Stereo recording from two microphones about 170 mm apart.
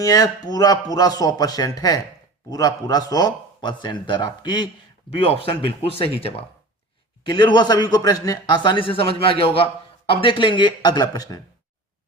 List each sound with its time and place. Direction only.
0.0 s a man's voice: 20° left (ahead or behind)